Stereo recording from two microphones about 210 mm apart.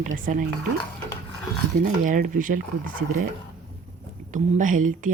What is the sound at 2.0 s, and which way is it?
Speech, 40° right (ahead or behind).